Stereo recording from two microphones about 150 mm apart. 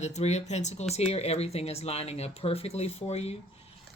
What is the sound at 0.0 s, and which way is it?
Speech, 50° left (ahead or behind).